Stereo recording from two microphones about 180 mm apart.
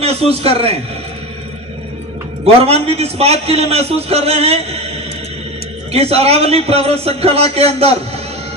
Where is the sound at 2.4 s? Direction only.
35° right (ahead or behind).